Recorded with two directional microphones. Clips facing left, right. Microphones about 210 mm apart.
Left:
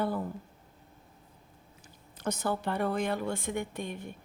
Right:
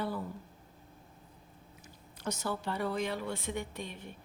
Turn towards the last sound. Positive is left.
turn(degrees=50)  # may be behind; listen again after turning